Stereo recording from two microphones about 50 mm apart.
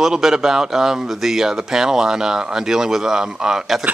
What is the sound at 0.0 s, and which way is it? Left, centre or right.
Speech, centre.